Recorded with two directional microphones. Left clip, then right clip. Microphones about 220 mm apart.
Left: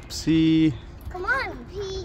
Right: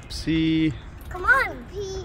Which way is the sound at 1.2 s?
5° right (ahead or behind).